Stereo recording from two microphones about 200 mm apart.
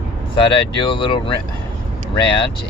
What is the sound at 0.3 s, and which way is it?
Speech, 25° left (ahead or behind).